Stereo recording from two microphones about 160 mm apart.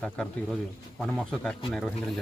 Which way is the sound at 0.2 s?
5° left (ahead or behind).